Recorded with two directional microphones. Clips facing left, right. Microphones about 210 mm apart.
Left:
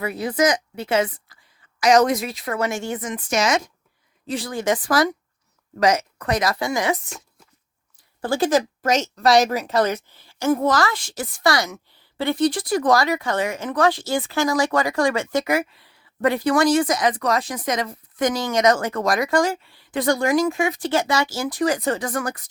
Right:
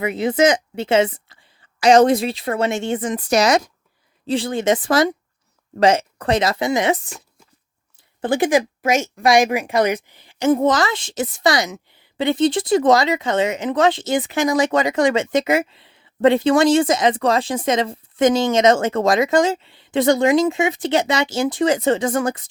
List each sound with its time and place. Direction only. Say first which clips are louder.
0.0 s speech: right 4 dB; 20° right (ahead or behind)
8.2 s speech: right 2 dB; 15° right (ahead or behind)